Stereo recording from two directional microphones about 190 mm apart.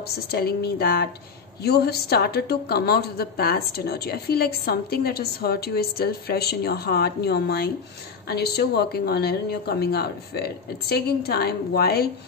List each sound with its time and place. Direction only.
0.0 s a woman's voice: 55° left (ahead or behind)